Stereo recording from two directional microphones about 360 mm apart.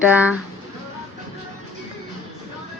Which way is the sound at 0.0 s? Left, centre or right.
Centre.